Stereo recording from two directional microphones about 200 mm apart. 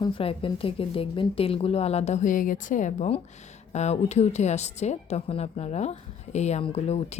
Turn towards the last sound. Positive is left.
turn(degrees=30)  # may be behind; listen again after turning